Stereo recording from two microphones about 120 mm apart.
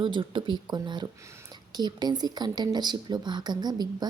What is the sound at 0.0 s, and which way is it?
Speech, 45° right (ahead or behind).